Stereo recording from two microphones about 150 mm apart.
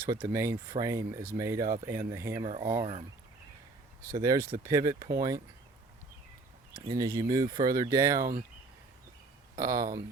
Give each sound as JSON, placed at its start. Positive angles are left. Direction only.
{"t": 0.1, "sound": "speech", "side_deg": -20}
{"t": 2.4, "sound": "speech", "side_deg": -30}
{"t": 4.1, "sound": "speech", "side_deg": -20}
{"t": 6.8, "sound": "speech", "side_deg": -25}
{"t": 9.6, "sound": "speech", "side_deg": -20}